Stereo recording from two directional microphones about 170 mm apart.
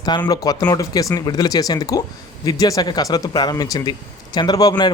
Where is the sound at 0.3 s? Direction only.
20° left (ahead or behind).